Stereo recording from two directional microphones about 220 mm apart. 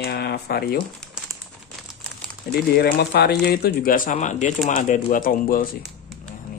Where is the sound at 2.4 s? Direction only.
45° left (ahead or behind).